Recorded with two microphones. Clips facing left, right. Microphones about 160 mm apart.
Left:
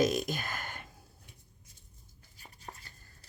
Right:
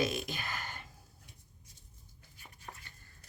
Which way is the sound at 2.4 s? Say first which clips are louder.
Left 2 dB; 35° left (ahead or behind).